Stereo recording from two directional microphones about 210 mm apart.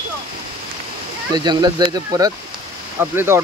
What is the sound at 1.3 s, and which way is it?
Speech, 20° right (ahead or behind).